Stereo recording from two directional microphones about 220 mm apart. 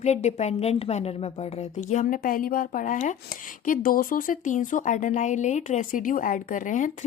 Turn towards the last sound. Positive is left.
turn(degrees=35)  # may be behind; listen again after turning